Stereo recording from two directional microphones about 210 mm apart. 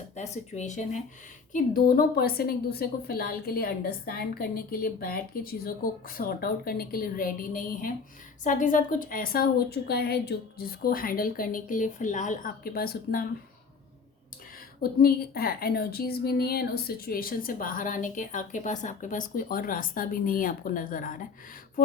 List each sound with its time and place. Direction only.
0.2 s a woman's voice: 35° left (ahead or behind)
14.8 s a woman's voice: 45° left (ahead or behind)